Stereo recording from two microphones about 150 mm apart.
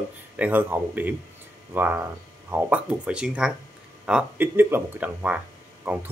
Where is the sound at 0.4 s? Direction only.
10° right (ahead or behind).